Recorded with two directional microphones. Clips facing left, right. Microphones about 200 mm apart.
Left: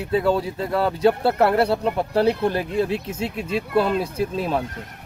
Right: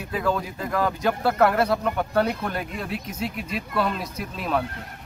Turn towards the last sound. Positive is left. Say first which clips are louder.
# left 4 dB
turn(degrees=30)  # may be behind; listen again after turning